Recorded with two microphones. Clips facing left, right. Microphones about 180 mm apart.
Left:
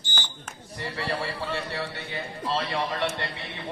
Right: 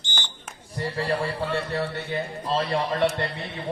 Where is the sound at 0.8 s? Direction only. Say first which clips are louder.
Right 5 dB; 45° right (ahead or behind).